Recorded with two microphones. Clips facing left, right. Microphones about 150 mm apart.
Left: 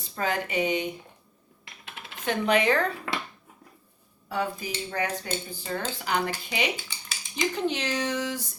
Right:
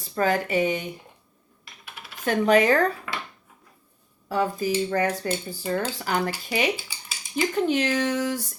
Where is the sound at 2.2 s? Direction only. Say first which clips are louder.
Right 4 dB; 40° right (ahead or behind).